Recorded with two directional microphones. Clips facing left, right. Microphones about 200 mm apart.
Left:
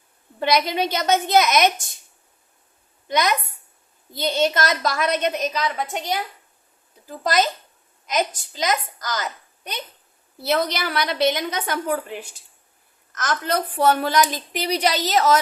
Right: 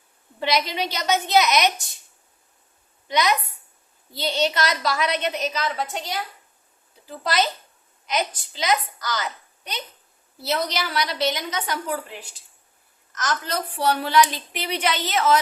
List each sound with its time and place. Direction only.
0.3 s a woman's voice: 50° left (ahead or behind)
3.1 s a woman's voice: 50° left (ahead or behind)
7.0 s a child's voice: 45° left (ahead or behind)
13.1 s a woman's voice: 55° left (ahead or behind)